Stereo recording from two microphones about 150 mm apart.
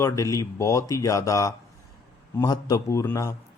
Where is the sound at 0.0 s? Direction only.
20° left (ahead or behind).